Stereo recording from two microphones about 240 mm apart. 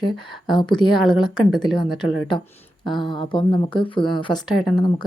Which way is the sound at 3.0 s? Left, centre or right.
Centre.